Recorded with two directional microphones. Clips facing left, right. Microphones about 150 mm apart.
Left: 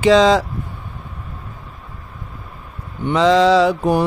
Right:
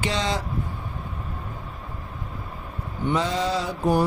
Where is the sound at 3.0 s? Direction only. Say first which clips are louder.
Left 11 dB; 90° left.